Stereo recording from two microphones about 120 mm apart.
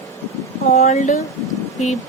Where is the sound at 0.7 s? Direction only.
80° left.